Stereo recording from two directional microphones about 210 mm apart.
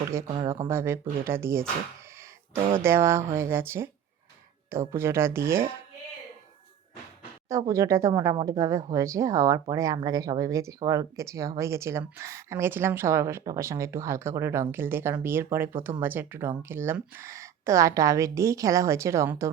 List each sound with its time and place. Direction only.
0.3 s speech: 25° right (ahead or behind)
0.7 s speech: 10° right (ahead or behind)
2.6 s speech: 25° right (ahead or behind)
2.8 s speech: 10° right (ahead or behind)
7.4 s speech: 15° right (ahead or behind)